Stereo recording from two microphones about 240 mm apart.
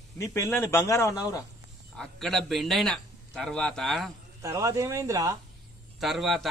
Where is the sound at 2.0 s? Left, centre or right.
Centre.